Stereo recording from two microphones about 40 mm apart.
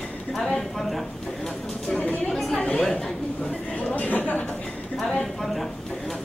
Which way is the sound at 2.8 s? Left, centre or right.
Centre.